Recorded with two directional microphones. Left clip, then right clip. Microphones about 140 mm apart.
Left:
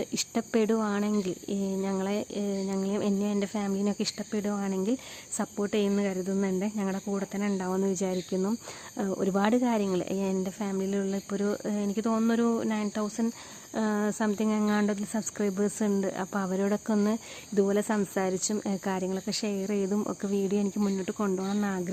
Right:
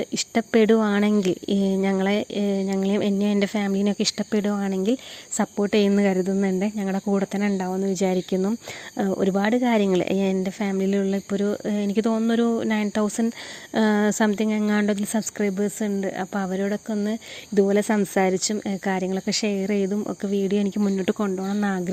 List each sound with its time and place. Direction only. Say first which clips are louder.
0.0 s speech: right 6 dB; 20° right (ahead or behind)
9.3 s speech: right 4 dB; 15° right (ahead or behind)
9.6 s speech: right 8 dB; 30° right (ahead or behind)
15.2 s speech: right 4 dB; 15° right (ahead or behind)
17.5 s speech: right 6 dB; 30° right (ahead or behind)
18.3 s speech: right 5 dB; 20° right (ahead or behind); by 21.2 s 35° right (ahead or behind)
21.2 s speech: right 4 dB; 25° right (ahead or behind)